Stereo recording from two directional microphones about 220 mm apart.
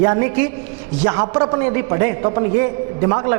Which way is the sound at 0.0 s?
20° right (ahead or behind).